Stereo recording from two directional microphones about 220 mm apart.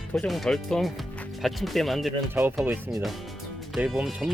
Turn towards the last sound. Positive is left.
turn(degrees=0)  # may be behind; listen again after turning